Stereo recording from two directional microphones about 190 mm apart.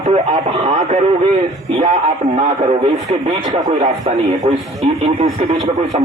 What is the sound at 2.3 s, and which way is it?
Speech, 35° right (ahead or behind).